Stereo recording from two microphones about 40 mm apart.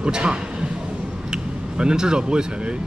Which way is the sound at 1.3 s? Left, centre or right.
Right.